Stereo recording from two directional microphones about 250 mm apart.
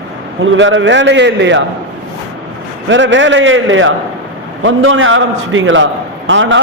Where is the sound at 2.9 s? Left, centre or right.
Right.